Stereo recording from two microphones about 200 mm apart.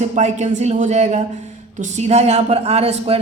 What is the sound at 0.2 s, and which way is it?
Speech, 35° right (ahead or behind).